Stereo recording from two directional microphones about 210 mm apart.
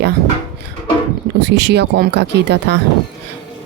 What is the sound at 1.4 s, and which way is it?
A woman's voice, 55° right (ahead or behind).